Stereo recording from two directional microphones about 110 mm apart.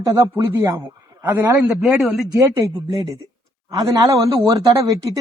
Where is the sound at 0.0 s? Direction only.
30° right (ahead or behind).